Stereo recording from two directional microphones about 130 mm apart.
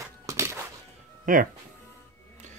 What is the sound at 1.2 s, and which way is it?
Speech, 90° right.